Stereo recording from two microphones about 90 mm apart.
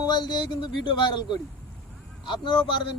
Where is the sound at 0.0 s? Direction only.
50° left (ahead or behind).